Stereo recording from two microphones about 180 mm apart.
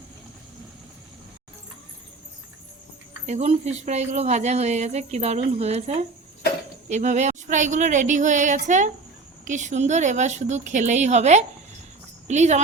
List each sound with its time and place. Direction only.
3.2 s a woman's voice: 35° right (ahead or behind)